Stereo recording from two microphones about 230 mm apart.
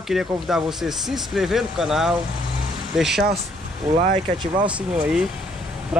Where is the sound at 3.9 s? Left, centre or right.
Centre.